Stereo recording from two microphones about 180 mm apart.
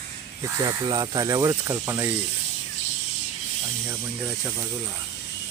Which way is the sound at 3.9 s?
10° right (ahead or behind).